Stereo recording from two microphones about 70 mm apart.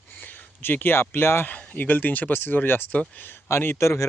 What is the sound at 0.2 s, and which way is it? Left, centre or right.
Speech, left.